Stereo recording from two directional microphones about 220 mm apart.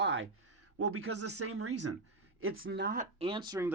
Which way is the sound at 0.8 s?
80° right.